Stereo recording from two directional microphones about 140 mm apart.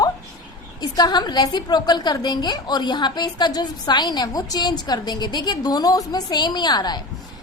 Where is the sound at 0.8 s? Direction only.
30° left (ahead or behind).